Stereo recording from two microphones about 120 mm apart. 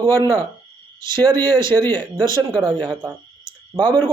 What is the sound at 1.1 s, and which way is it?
Speech, 40° right (ahead or behind).